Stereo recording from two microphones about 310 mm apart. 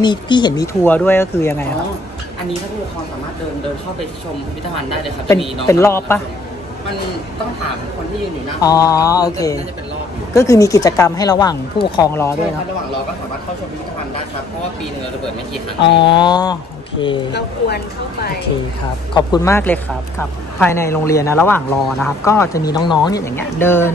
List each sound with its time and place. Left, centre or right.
0.0 s speech: centre
5.4 s speech: centre
8.5 s speech: centre
16.0 s speech: centre
17.3 s a woman's voice: left
19.1 s speech: centre